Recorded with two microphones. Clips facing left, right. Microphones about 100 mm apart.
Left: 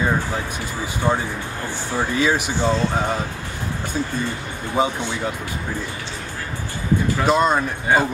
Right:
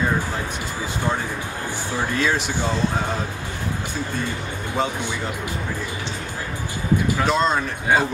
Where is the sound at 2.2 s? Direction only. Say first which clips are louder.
Left 3 dB; 15° left (ahead or behind).